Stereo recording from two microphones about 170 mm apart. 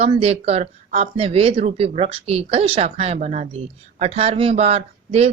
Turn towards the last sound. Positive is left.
turn(degrees=-40)  # may be behind; listen again after turning